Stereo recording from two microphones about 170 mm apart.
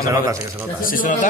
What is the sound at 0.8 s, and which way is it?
Speech, 55° left (ahead or behind).